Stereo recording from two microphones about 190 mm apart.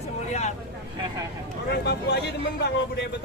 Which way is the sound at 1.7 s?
60° left (ahead or behind).